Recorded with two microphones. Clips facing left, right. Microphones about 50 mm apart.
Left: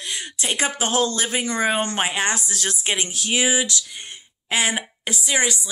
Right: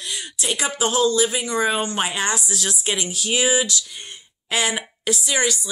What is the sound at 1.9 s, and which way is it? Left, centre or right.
A woman's voice, left.